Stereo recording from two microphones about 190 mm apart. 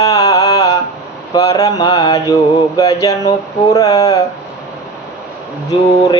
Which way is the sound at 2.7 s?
15° left (ahead or behind).